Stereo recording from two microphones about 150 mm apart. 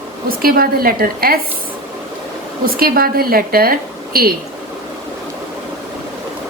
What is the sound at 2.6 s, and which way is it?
A woman's voice, 75° right (ahead or behind).